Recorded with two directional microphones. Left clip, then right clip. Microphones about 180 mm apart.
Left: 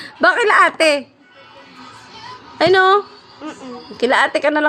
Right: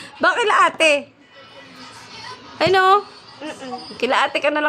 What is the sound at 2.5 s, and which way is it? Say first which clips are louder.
A woman's voice: left 2 dB; 15° left (ahead or behind).